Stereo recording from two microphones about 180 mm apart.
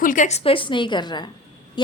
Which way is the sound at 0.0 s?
45° left (ahead or behind).